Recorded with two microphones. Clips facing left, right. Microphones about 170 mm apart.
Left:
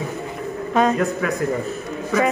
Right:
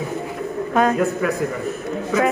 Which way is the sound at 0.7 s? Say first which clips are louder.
Even; 5° right (ahead or behind).